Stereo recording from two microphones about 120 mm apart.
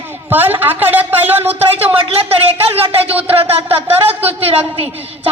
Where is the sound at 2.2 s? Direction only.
55° right (ahead or behind).